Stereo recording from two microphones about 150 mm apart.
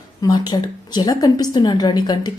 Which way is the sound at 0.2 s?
25° left (ahead or behind).